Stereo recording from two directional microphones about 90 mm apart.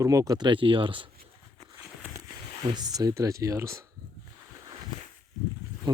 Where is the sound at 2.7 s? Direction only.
45° right (ahead or behind).